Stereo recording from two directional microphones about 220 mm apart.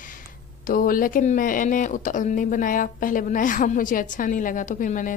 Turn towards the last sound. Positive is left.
turn(degrees=35)  # may be behind; listen again after turning